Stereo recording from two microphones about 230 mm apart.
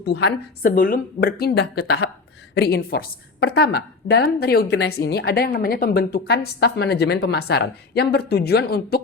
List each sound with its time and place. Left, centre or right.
0.0 s a woman's voice: left